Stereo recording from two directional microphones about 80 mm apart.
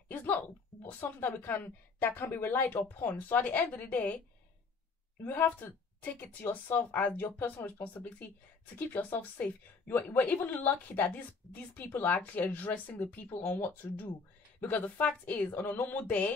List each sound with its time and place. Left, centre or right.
0.1 s a sound: left
0.8 s a woman's voice: left
5.2 s a woman's voice: left